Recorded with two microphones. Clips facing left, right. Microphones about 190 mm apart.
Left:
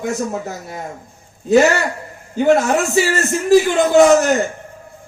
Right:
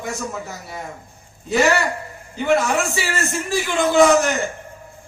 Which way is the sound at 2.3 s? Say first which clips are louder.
Left 5 dB; 45° left (ahead or behind).